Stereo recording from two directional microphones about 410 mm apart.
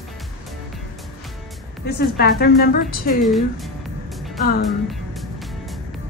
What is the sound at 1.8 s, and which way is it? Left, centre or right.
A woman's voice, left.